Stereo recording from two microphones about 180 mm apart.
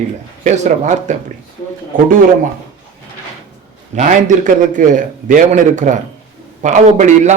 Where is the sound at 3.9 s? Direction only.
45° right (ahead or behind).